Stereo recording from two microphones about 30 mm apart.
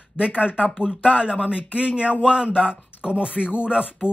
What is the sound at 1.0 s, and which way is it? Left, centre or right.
Speech, left.